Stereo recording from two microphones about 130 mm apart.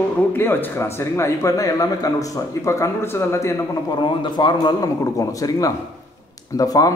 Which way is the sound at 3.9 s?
35° left (ahead or behind).